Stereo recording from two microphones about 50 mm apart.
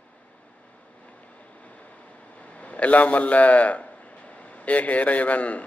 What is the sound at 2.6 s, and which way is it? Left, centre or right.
A man's voice, left.